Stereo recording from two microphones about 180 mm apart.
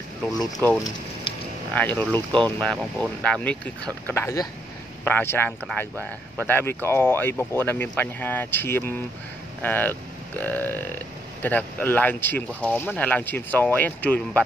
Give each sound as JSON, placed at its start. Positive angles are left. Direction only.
{"t": 0.3, "sound": "speech", "side_deg": 20}
{"t": 1.7, "sound": "speech", "side_deg": 10}